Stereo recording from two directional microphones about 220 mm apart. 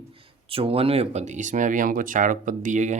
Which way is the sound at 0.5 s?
25° right (ahead or behind).